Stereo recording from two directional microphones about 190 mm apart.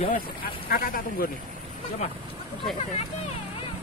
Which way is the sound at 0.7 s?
50° left (ahead or behind).